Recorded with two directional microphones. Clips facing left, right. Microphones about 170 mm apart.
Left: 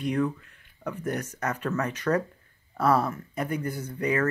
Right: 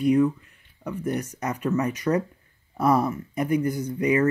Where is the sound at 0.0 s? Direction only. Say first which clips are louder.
Right 7 dB; 10° right (ahead or behind).